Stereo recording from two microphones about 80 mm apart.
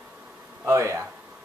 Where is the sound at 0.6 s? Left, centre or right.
Right.